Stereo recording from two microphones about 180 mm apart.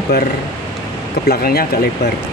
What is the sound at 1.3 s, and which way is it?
Speech, 60° left (ahead or behind).